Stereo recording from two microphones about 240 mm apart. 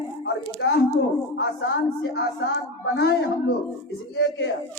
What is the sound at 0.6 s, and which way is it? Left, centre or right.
A woman's voice, left.